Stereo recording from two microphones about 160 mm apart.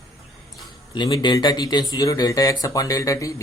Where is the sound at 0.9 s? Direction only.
25° left (ahead or behind).